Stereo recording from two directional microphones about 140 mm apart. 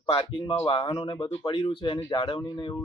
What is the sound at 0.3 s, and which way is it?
Speech, 40° left (ahead or behind).